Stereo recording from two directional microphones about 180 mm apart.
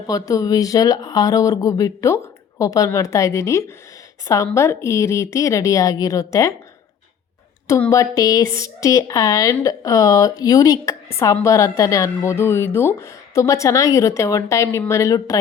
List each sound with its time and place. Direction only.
0.1 s speech: 20° left (ahead or behind)
7.7 s speech: 15° left (ahead or behind)